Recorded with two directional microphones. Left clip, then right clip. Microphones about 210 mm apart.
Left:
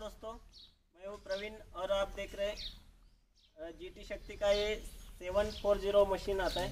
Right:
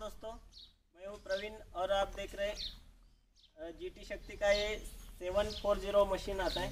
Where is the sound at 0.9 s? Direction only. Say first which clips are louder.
Right 1 dB; 10° right (ahead or behind).